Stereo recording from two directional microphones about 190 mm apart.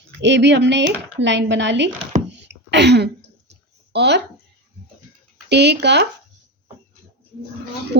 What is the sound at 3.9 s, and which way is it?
Speech, 60° right (ahead or behind).